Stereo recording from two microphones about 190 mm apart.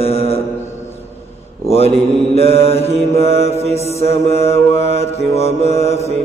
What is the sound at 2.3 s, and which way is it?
Mantra, 30° left (ahead or behind).